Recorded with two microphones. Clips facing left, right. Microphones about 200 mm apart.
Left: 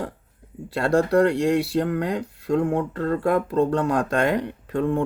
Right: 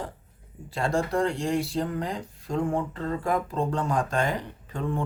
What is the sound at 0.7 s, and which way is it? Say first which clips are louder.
Speech: left 7 dB; 65° left (ahead or behind).